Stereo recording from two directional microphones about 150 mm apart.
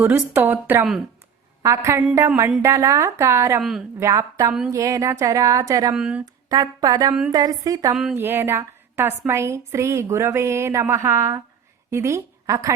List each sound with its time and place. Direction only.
0.0 s a woman's voice: 15° right (ahead or behind)
3.6 s speech: centre (ahead or behind)
3.9 s a woman's voice: 20° right (ahead or behind)
5.9 s speech: 5° right (ahead or behind)
6.2 s a woman's voice: 25° right (ahead or behind)